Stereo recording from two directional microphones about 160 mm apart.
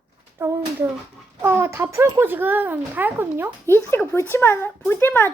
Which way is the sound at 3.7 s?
15° left (ahead or behind).